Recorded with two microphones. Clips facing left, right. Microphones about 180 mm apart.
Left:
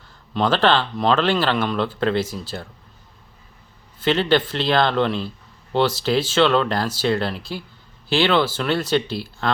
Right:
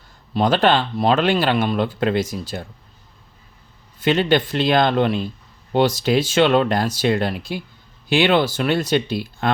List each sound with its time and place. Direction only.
0.5 s speech: 15° right (ahead or behind)
4.2 s speech: 15° right (ahead or behind)